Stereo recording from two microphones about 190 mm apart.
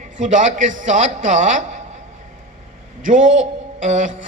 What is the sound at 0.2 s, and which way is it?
A man's voice, 40° right (ahead or behind).